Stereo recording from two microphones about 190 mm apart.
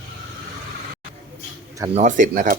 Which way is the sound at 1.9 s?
40° right (ahead or behind).